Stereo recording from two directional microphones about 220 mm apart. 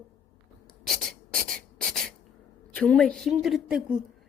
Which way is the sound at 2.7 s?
5° left (ahead or behind).